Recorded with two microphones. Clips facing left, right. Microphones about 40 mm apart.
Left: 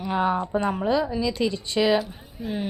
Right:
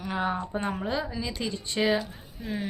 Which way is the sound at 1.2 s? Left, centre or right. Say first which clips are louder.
Left 8 dB; left.